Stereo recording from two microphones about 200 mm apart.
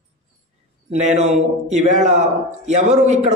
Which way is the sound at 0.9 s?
35° right (ahead or behind).